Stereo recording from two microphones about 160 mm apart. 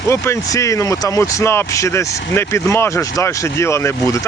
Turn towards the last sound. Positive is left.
turn(degrees=20)  # may be behind; listen again after turning